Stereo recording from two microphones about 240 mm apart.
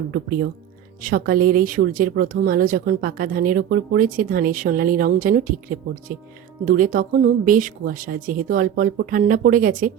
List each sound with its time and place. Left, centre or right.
1.0 s speech: right